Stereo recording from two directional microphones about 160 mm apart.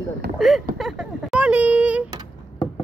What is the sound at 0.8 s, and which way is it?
Speech, centre (ahead or behind).